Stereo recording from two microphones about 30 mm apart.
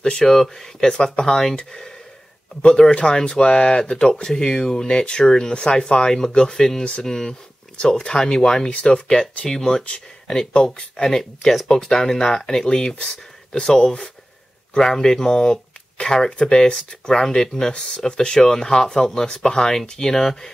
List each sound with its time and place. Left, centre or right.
0.0 s speech: left
0.9 s speech: left
1.6 s speech: left
2.9 s speech: left
3.2 s speech: left
4.4 s speech: left
4.8 s speech: left
9.8 s speech: left
11.1 s speech: centre
16.3 s speech: left